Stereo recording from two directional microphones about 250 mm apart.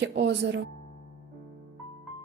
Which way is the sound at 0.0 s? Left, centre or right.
Right.